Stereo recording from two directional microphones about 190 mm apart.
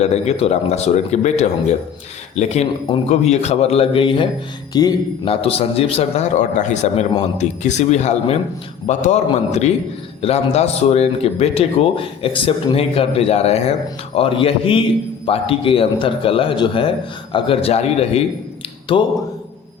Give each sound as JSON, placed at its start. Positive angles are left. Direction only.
{"t": 0.0, "sound": "a man's voice", "side_deg": 35}